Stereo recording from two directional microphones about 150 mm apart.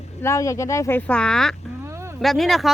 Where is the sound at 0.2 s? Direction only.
20° left (ahead or behind).